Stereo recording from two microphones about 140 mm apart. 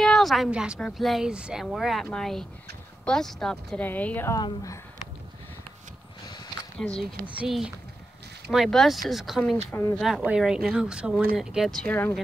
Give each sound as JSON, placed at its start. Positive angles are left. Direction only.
{"t": 0.0, "sound": "speech", "side_deg": 0}
{"t": 4.3, "sound": "a woman's voice", "side_deg": 25}
{"t": 6.8, "sound": "speech", "side_deg": 5}
{"t": 7.2, "sound": "speech", "side_deg": -5}
{"t": 9.7, "sound": "speech", "side_deg": 15}
{"t": 9.9, "sound": "speech", "side_deg": 0}